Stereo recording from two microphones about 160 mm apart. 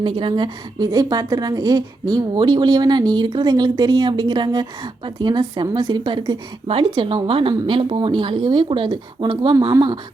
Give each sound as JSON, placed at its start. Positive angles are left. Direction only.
{"t": 0.0, "sound": "a woman's voice", "side_deg": -30}